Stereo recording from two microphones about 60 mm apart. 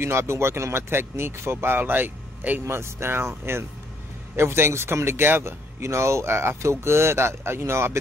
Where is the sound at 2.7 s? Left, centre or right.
Right.